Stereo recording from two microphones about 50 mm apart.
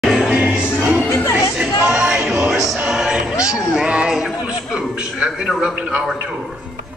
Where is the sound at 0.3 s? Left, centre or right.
Right.